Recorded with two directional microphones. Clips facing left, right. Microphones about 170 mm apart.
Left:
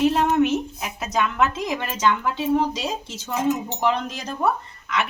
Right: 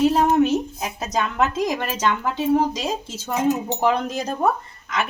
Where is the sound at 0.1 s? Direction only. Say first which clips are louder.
Right 2 dB; 35° right (ahead or behind).